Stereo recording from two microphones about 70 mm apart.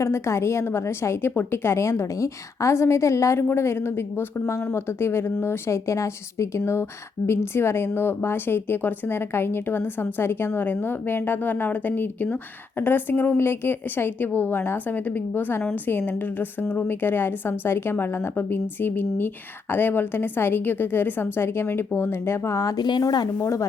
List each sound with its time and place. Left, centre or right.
0.0 s a woman's voice: left
22.8 s a woman's voice: left
23.4 s chopping: left